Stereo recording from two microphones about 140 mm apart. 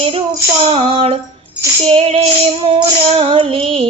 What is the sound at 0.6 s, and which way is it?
Female singing, 40° right (ahead or behind).